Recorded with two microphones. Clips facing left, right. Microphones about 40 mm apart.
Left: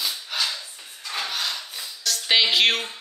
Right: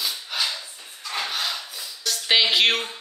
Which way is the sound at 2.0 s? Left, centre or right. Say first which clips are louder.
Even; centre.